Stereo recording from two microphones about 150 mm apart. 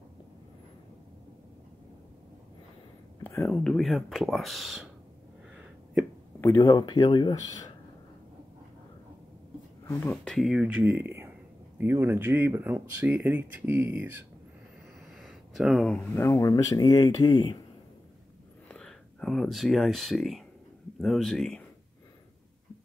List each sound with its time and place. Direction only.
3.3 s speech: 15° left (ahead or behind)
6.4 s speech: 25° left (ahead or behind)
9.8 s speech: 10° left (ahead or behind); by 14.2 s 10° right (ahead or behind)
15.1 s a sound: centre (ahead or behind)
16.3 s speech: 20° left (ahead or behind)
18.7 s speech: 5° left (ahead or behind)